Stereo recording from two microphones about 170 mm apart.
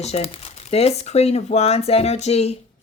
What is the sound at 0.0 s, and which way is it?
Speech, 35° left (ahead or behind).